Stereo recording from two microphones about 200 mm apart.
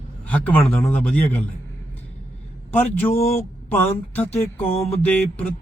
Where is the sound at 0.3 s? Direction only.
10° left (ahead or behind).